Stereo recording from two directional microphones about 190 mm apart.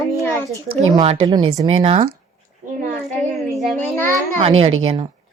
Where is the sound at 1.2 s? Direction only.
20° right (ahead or behind).